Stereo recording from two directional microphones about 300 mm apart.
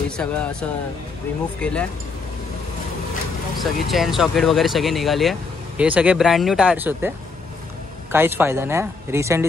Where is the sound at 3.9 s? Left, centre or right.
Centre.